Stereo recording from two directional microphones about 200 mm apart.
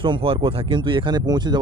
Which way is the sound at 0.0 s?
25° right (ahead or behind).